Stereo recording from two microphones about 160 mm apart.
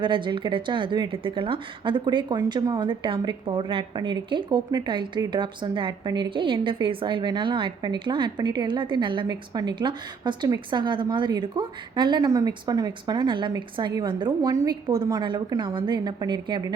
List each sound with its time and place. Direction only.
0.0 s a woman's voice: 30° right (ahead or behind)